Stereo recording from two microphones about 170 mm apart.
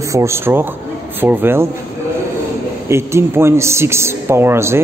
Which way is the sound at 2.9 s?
15° right (ahead or behind).